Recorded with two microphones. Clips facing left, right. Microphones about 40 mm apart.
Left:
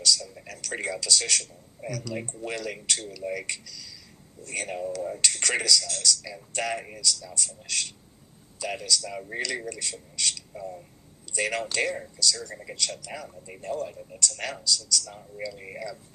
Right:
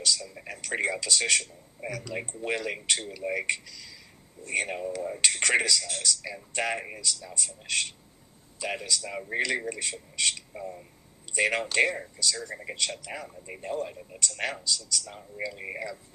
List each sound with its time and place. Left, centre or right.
0.0 s a man's voice: right